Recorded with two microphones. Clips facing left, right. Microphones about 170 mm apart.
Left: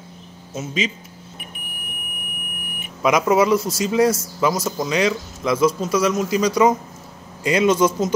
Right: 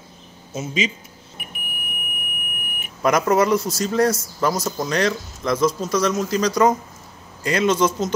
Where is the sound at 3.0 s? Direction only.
5° left (ahead or behind).